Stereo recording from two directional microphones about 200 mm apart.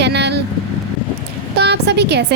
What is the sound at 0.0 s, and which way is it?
Vehicle, 55° right (ahead or behind).